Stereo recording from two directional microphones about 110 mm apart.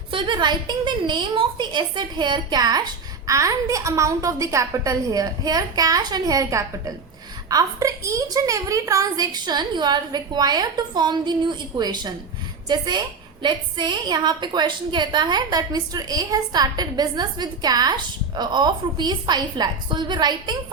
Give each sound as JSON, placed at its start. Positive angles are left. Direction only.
{"t": 0.1, "sound": "a woman's voice", "side_deg": -50}